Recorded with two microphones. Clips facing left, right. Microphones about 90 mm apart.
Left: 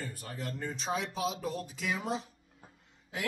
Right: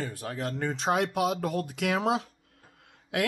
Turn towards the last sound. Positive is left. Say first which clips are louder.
# right 9 dB
turn(degrees=-75)  # may be behind; listen again after turning